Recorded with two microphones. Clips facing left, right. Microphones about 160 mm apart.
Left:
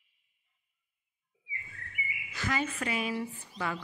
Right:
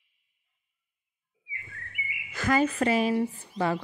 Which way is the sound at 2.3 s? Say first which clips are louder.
Right 9 dB; 50° right (ahead or behind).